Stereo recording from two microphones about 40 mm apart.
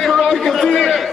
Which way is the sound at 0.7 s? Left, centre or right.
Centre.